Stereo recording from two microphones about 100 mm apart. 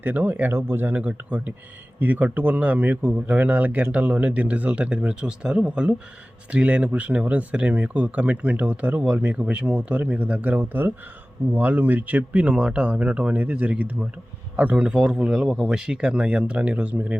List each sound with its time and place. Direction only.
0.0 s speech: 20° right (ahead or behind)